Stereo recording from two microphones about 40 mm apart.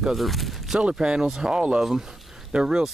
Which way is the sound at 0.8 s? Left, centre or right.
Right.